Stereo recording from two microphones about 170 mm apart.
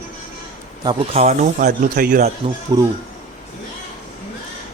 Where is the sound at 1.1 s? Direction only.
45° right (ahead or behind).